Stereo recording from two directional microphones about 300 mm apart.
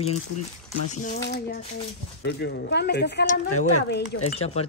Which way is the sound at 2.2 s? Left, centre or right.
Left.